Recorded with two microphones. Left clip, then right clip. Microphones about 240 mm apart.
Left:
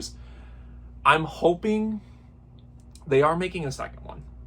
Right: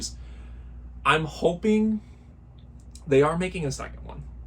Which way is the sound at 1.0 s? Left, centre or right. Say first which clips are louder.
Left 2 dB; centre.